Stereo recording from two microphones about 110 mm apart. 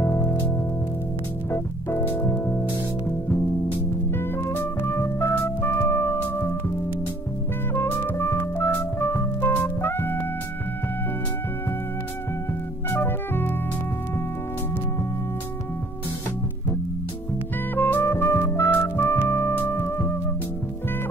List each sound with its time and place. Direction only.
0.0 s music: 20° left (ahead or behind)
1.5 s music: 20° left (ahead or behind)
4.4 s music: 20° left (ahead or behind)
7.7 s music: 20° left (ahead or behind)
12.9 s music: 20° left (ahead or behind)
17.7 s music: 20° left (ahead or behind)